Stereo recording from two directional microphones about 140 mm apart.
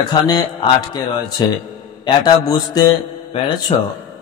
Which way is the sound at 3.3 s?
40° left (ahead or behind).